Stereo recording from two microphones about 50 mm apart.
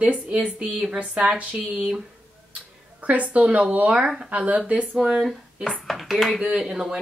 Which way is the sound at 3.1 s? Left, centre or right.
Right.